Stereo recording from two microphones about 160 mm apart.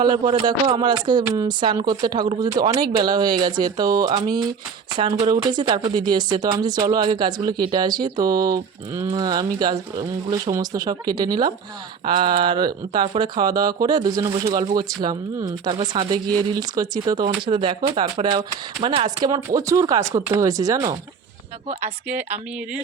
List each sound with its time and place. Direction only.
0.0 s speech: 25° right (ahead or behind)